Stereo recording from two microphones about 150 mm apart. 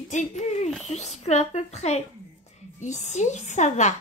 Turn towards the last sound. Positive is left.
turn(degrees=50)  # may be behind; listen again after turning